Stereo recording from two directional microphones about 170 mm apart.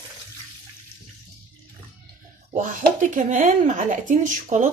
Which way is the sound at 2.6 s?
45° right (ahead or behind).